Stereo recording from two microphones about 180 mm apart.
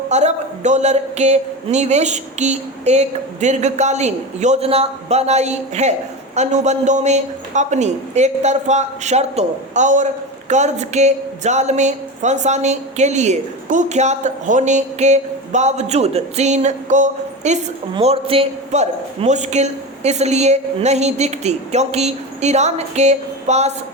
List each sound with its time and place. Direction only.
0.1 s a woman's voice: 40° right (ahead or behind)